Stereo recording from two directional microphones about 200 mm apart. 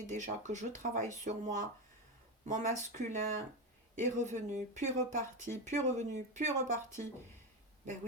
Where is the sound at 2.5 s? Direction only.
35° right (ahead or behind).